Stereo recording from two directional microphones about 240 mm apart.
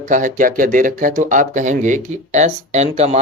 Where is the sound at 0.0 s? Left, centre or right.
Right.